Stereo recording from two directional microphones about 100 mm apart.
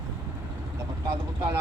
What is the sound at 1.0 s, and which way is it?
Speech, 30° right (ahead or behind).